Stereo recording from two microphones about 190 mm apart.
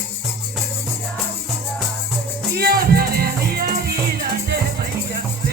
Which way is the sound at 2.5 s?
55° right (ahead or behind).